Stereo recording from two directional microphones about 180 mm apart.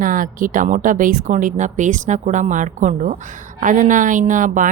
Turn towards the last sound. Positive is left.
turn(degrees=-45)  # may be behind; listen again after turning